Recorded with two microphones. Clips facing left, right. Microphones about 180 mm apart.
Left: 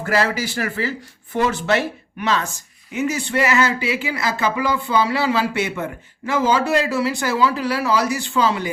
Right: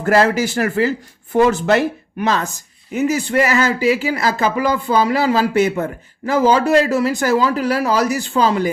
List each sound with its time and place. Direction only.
0.0 s speech: 50° right (ahead or behind)